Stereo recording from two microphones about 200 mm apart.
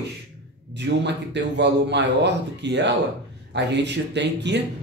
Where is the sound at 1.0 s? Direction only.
60° right (ahead or behind).